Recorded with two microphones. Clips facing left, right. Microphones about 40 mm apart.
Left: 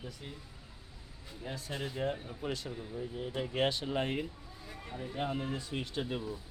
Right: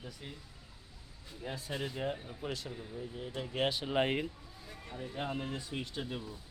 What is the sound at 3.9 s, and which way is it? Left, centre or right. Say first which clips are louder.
Speech: right 2 dB; right.